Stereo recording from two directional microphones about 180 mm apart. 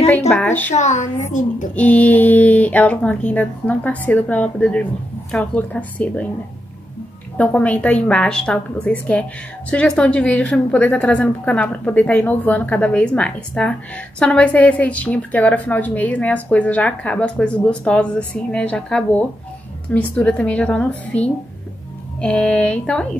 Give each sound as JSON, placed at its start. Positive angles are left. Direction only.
{"t": 0.3, "sound": "a woman's voice", "side_deg": 5}
{"t": 0.7, "sound": "a woman's voice", "side_deg": 40}
{"t": 1.8, "sound": "a woman's voice", "side_deg": 10}
{"t": 7.3, "sound": "a woman's voice", "side_deg": 10}